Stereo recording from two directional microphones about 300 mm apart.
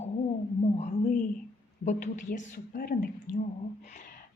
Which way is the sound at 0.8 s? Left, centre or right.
Left.